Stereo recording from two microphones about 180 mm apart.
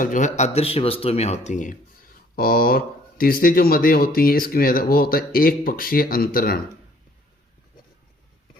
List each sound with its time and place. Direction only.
0.0 s speech: 45° left (ahead or behind)
2.3 s speech: 55° left (ahead or behind)